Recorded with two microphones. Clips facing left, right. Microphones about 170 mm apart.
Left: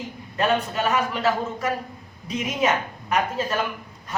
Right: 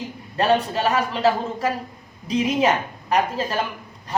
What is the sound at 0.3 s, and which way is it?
A man's voice, 30° right (ahead or behind).